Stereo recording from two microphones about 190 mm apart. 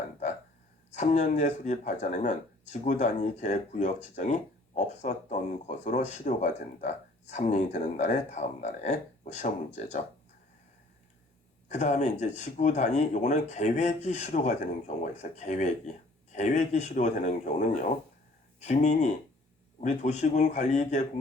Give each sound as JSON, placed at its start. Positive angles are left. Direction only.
{"t": 0.9, "sound": "speech", "side_deg": 35}
{"t": 11.7, "sound": "speech", "side_deg": 35}